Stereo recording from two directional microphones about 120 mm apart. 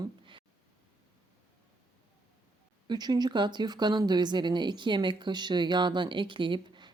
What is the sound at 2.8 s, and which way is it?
Speech, 35° right (ahead or behind).